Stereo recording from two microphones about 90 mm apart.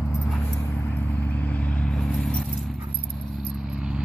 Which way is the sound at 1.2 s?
20° left (ahead or behind).